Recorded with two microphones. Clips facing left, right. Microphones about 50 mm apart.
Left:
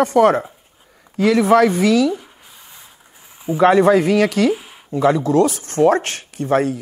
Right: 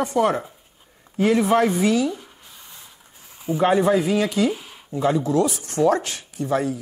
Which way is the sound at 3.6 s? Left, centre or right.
Left.